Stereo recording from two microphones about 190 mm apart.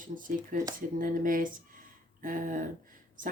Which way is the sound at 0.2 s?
45° right (ahead or behind).